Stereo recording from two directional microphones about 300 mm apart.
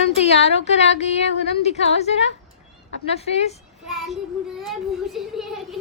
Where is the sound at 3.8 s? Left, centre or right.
Centre.